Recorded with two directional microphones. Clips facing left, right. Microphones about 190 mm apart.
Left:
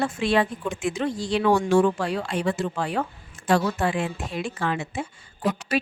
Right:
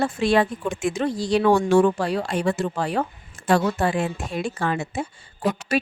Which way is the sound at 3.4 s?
50° right (ahead or behind).